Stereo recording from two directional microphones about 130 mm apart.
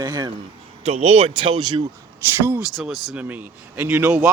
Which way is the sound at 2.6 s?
Centre (ahead or behind).